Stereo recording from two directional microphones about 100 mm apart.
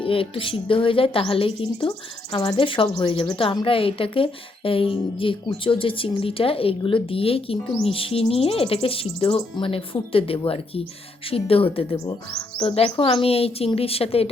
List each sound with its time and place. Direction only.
0.0 s a woman's voice: 65° left (ahead or behind)